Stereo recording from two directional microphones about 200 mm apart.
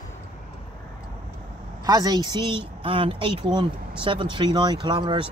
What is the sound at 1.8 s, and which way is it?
Speech, 20° right (ahead or behind).